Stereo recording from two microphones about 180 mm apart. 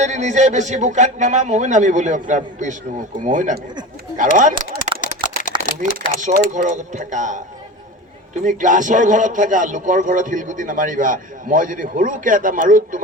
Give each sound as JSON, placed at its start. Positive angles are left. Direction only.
{"t": 0.0, "sound": "a man's voice", "side_deg": -40}
{"t": 4.8, "sound": "a sound", "side_deg": 45}
{"t": 6.3, "sound": "a man's voice", "side_deg": -45}